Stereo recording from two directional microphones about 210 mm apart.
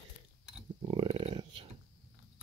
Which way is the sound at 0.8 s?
25° right (ahead or behind).